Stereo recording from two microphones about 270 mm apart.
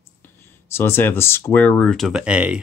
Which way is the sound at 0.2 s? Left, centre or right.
Centre.